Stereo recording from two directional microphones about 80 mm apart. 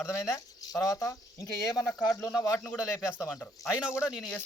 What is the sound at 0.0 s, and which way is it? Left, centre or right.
Speech, left.